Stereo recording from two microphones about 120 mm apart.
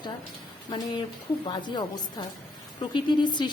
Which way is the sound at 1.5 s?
40° left (ahead or behind).